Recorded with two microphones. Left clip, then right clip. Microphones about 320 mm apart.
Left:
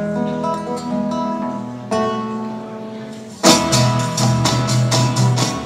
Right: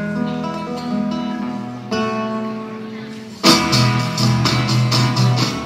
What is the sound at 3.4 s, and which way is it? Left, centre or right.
Music, left.